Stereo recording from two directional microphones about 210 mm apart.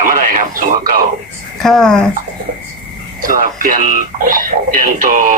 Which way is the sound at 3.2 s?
40° right (ahead or behind).